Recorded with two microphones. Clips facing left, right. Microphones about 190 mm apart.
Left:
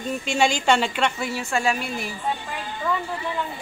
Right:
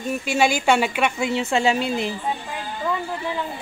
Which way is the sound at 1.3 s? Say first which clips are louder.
Right 4 dB; 20° right (ahead or behind).